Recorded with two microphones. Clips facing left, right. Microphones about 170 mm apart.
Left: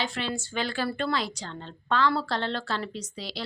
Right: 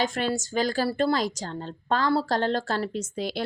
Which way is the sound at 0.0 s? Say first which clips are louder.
Right 5 dB; 45° right (ahead or behind).